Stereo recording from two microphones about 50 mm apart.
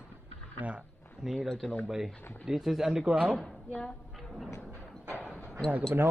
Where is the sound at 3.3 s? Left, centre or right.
Centre.